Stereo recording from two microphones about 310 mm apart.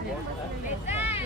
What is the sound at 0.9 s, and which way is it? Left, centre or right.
Vehicle, centre.